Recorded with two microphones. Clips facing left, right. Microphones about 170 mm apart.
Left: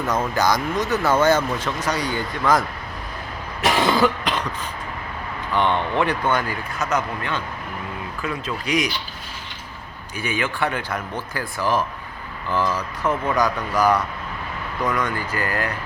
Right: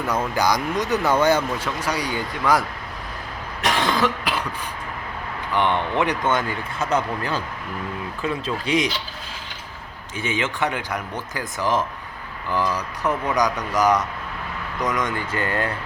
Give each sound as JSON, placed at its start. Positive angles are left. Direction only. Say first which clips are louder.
{"t": 0.3, "sound": "speech", "louder": "even", "side_deg": -15}
{"t": 3.6, "sound": "cough", "louder": "left 3 dB", "side_deg": 5}
{"t": 6.0, "sound": "speech", "louder": "even", "side_deg": -20}
{"t": 10.2, "sound": "speech", "louder": "even", "side_deg": -25}